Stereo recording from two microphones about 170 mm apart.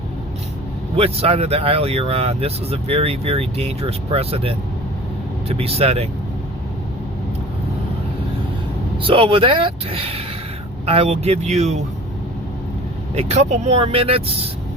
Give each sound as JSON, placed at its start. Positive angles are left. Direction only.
{"t": 0.9, "sound": "speech", "side_deg": -35}
{"t": 9.0, "sound": "speech", "side_deg": -30}
{"t": 13.1, "sound": "speech", "side_deg": -40}